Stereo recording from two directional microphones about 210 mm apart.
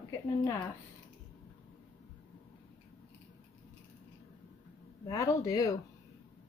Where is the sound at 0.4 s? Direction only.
15° left (ahead or behind).